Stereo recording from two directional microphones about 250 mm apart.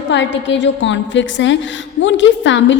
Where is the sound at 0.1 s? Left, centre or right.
Left.